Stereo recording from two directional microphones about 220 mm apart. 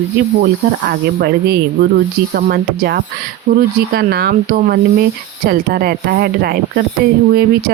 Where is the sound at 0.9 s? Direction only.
45° right (ahead or behind).